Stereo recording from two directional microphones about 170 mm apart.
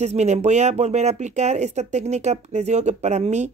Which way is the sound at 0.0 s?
40° right (ahead or behind).